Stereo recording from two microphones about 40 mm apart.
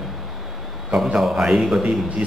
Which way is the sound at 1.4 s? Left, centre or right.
Centre.